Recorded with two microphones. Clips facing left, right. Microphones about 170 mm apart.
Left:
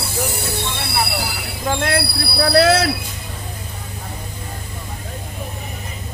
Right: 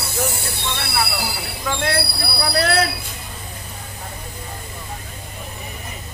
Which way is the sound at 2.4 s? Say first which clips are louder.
Left 6 dB; 85° left.